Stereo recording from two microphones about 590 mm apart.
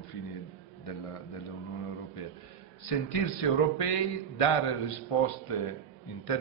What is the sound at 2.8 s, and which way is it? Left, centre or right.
A man's voice, left.